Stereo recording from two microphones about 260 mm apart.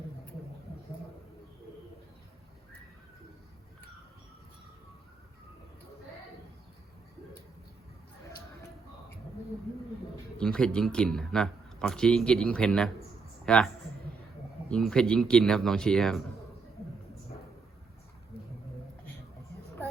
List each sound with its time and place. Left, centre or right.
10.3 s speech: centre
14.7 s speech: centre